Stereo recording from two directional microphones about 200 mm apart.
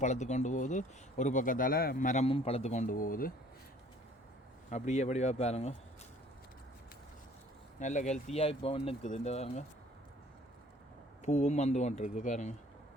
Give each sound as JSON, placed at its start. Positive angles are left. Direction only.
{"t": 0.0, "sound": "speech", "side_deg": 35}
{"t": 4.7, "sound": "speech", "side_deg": 35}
{"t": 7.8, "sound": "speech", "side_deg": 35}
{"t": 11.3, "sound": "speech", "side_deg": 35}